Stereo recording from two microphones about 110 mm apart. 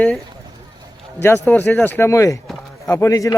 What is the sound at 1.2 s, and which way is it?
A man's voice, 20° left (ahead or behind).